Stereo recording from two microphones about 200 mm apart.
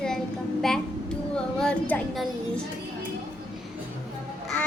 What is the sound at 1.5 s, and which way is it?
Speech, centre (ahead or behind).